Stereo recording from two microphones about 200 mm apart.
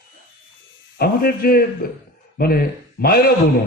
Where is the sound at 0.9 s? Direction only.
45° left (ahead or behind).